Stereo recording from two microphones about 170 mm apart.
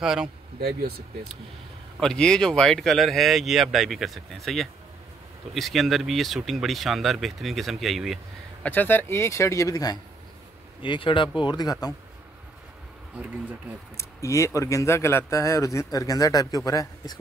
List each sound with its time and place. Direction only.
0.0 s speech: 5° right (ahead or behind)
0.6 s speech: 60° right (ahead or behind)
2.0 s speech: 5° left (ahead or behind)
8.6 s speech: 10° left (ahead or behind)
13.9 s speech: 15° left (ahead or behind)